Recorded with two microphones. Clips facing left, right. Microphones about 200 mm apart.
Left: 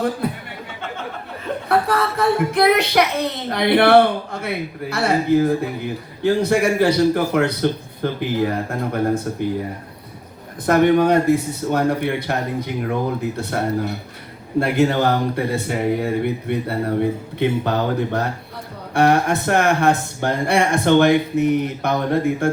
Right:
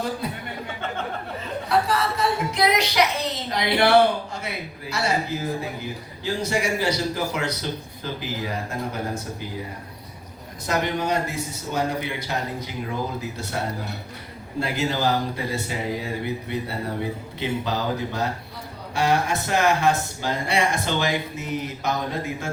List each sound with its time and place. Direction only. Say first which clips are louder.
0.2 s a sound: left 7 dB; 55° left (ahead or behind)
1.6 s speech: left 3 dB; 55° left (ahead or behind)
10.7 s speech: left 10 dB; 55° left (ahead or behind)